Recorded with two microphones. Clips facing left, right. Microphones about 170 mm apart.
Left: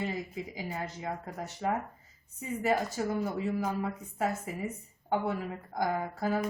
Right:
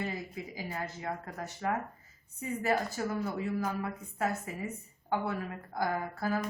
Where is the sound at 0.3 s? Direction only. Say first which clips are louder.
Left 2 dB; 20° left (ahead or behind).